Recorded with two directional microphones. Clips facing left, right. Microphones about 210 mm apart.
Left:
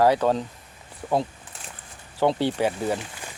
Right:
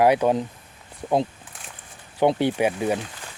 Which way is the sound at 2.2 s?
15° right (ahead or behind).